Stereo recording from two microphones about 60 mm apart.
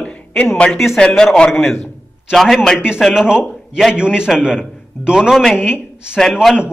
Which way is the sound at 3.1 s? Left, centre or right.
Centre.